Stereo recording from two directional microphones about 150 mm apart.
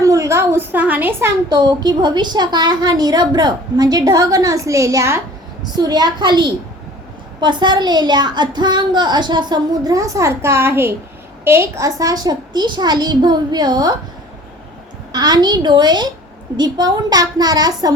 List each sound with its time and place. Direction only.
0.0 s a woman's voice: 20° right (ahead or behind)
1.5 s a woman's voice: 30° right (ahead or behind)
15.1 s a woman's voice: 25° right (ahead or behind)